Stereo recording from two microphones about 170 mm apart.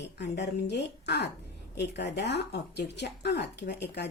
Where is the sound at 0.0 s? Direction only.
85° left.